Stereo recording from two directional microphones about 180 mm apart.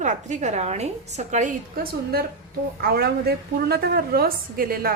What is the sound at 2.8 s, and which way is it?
A woman's voice, 60° right (ahead or behind).